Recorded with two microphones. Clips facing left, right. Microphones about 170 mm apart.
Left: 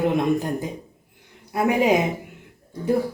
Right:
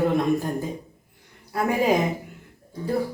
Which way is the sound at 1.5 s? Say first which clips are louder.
Left 3 dB; 20° left (ahead or behind).